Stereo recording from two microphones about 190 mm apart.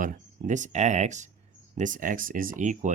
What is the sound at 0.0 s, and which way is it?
Speech, 45° right (ahead or behind).